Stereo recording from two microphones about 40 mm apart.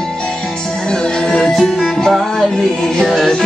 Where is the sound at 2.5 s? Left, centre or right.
Centre.